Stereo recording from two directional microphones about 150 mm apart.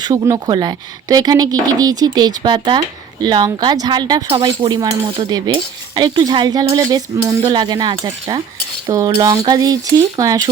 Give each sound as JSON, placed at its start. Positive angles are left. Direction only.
{"t": 0.0, "sound": "speech", "side_deg": -25}